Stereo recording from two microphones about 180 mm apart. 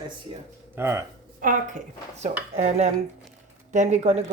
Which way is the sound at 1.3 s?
50° right (ahead or behind).